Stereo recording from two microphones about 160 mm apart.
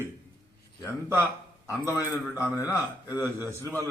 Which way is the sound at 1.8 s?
15° right (ahead or behind).